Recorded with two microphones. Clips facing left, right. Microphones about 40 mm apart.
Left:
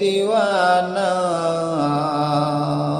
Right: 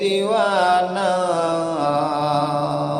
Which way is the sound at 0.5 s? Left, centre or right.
Centre.